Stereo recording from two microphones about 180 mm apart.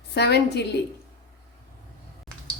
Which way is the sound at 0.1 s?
65° left (ahead or behind).